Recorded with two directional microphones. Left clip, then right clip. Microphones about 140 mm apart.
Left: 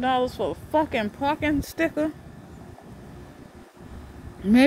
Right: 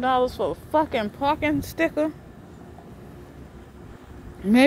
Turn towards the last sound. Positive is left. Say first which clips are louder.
# even
turn(degrees=35)  # may be behind; listen again after turning